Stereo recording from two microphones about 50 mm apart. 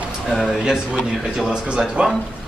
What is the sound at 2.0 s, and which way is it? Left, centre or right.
Speech, centre.